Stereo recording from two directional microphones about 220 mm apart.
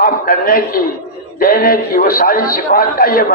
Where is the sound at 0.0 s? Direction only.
40° left (ahead or behind).